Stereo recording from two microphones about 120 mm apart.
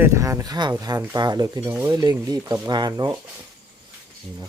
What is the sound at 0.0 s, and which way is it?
Speech, 25° right (ahead or behind).